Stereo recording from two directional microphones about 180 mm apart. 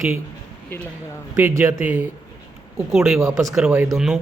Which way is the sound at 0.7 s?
10° left (ahead or behind).